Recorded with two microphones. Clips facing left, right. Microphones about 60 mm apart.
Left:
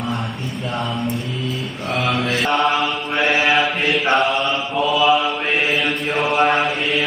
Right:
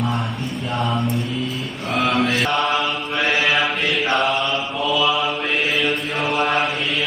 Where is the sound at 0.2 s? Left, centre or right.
Centre.